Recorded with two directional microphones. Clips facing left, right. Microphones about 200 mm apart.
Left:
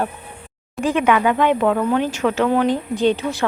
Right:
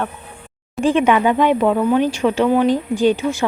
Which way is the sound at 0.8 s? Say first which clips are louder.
Right 2 dB; 25° right (ahead or behind).